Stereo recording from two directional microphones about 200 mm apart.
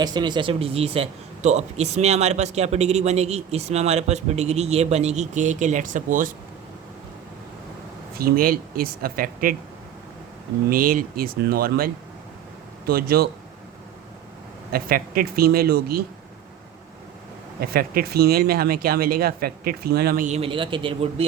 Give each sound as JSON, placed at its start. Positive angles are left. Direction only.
{"t": 0.0, "sound": "speech", "side_deg": -20}
{"t": 8.2, "sound": "speech", "side_deg": -45}
{"t": 10.7, "sound": "speech", "side_deg": -45}
{"t": 12.9, "sound": "speech", "side_deg": -50}
{"t": 14.7, "sound": "speech", "side_deg": -45}
{"t": 17.6, "sound": "speech", "side_deg": -50}